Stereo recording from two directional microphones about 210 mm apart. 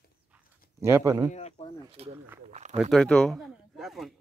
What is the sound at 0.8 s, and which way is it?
Speech, 15° right (ahead or behind).